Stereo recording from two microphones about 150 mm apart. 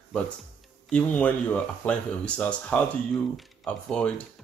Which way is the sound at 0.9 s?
10° left (ahead or behind).